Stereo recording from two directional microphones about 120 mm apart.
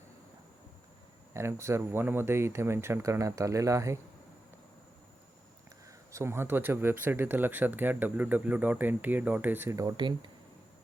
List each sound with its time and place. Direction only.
1.3 s speech: 20° right (ahead or behind)
6.1 s speech: 25° right (ahead or behind)
9.7 s speech: 35° right (ahead or behind)